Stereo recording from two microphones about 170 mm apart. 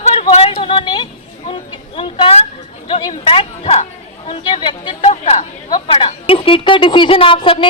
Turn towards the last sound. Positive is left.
turn(degrees=30)  # may be behind; listen again after turning